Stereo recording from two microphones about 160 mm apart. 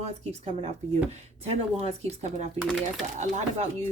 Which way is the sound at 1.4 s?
45° right (ahead or behind).